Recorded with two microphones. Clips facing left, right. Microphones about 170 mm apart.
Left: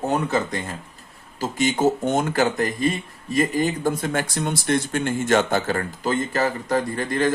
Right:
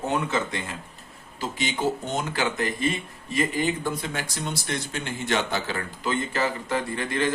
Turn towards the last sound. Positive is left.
turn(degrees=40)  # may be behind; listen again after turning